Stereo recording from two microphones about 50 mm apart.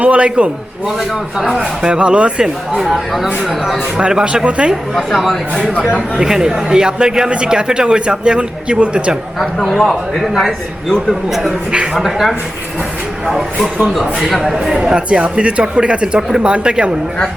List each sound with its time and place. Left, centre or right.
0.0 s speech: right
1.5 s speech: centre
2.0 s speech: right
2.7 s speech: centre
3.9 s speech: centre
4.9 s a man's voice: centre; by 9.1 s right
9.7 s a man's voice: centre; by 16.9 s right